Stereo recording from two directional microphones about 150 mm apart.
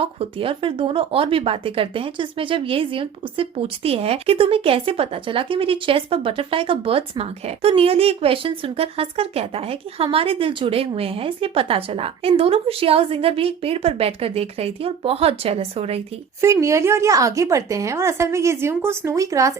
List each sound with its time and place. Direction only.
0.0 s speech: 40° right (ahead or behind)
16.4 s speech: 20° right (ahead or behind)